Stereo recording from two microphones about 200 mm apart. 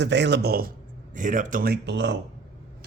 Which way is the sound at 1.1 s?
40° right (ahead or behind).